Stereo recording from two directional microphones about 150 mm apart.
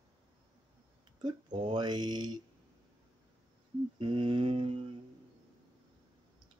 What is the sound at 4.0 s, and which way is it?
Speech, 35° right (ahead or behind).